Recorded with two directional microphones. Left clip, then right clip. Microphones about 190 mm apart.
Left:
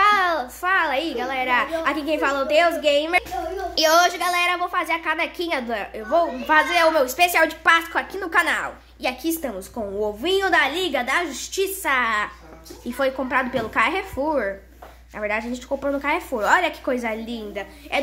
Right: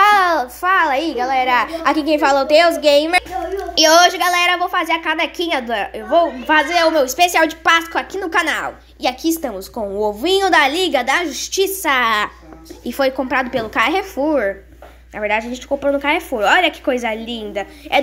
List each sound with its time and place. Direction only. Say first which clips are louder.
0.0 s a child's voice: right 6 dB; 15° right (ahead or behind)
17.6 s a woman's voice: right 8 dB; 25° right (ahead or behind)